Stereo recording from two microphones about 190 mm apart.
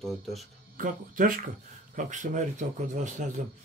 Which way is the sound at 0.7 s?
45° right (ahead or behind).